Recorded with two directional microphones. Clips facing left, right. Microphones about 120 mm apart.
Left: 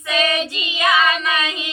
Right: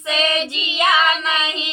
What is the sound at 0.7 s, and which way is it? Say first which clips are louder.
Child singing: even; 25° right (ahead or behind).